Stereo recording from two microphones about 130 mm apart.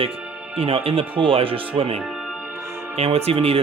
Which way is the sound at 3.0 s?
50° right (ahead or behind).